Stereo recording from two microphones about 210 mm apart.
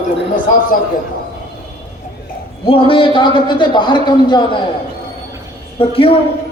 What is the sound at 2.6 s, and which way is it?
A man's voice, 25° left (ahead or behind).